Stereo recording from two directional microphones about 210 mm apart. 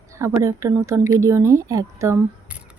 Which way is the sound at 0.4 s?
15° right (ahead or behind).